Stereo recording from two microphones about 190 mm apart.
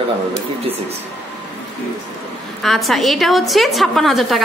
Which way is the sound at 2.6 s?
Centre (ahead or behind).